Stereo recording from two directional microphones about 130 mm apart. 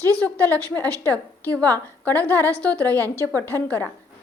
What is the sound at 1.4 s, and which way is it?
A woman's voice, 15° left (ahead or behind).